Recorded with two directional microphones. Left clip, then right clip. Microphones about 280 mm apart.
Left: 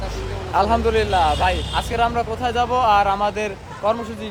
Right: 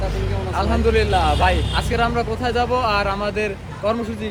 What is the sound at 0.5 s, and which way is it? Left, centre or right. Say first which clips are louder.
Speech: left 6 dB; left.